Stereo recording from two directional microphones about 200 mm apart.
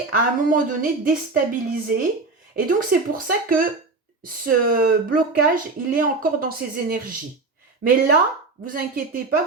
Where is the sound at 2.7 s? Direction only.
45° right (ahead or behind).